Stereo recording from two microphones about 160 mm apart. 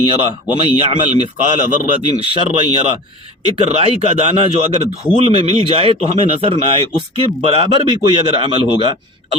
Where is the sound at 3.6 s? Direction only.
40° right (ahead or behind).